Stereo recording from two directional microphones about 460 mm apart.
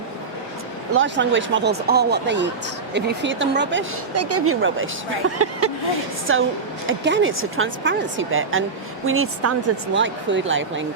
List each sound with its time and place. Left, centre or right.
0.9 s a woman's voice: right